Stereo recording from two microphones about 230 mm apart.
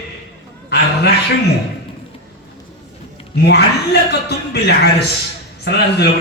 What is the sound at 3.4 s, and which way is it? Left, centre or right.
A man's voice, left.